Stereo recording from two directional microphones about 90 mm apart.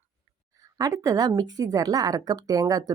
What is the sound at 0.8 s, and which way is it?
Speech, 40° right (ahead or behind).